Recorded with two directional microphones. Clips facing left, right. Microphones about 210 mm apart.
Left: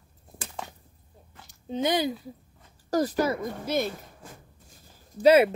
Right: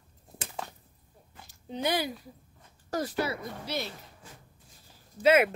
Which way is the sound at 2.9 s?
40° left (ahead or behind).